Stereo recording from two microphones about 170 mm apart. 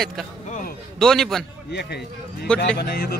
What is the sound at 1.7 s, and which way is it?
Speech, 75° left (ahead or behind).